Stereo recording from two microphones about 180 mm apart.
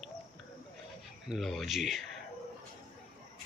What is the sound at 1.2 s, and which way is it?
Speech, centre (ahead or behind).